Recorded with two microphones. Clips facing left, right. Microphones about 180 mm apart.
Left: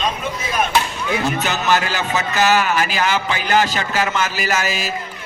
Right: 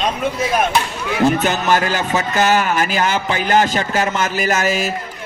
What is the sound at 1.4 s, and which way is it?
Speech, 50° right (ahead or behind).